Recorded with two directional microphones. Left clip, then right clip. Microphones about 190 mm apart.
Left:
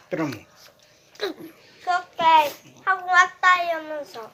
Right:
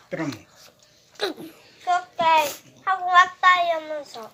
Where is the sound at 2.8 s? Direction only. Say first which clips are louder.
Right 1 dB; 15° left (ahead or behind).